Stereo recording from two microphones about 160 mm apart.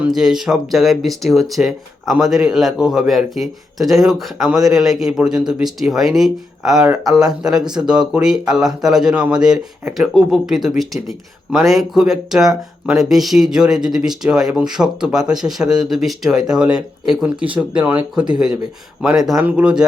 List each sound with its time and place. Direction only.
0.0 s speech: 5° right (ahead or behind)